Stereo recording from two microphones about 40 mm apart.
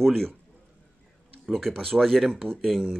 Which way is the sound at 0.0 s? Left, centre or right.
Centre.